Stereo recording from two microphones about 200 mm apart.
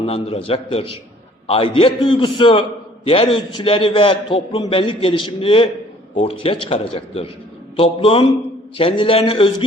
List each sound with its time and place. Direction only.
0.0 s a man's voice: 30° left (ahead or behind)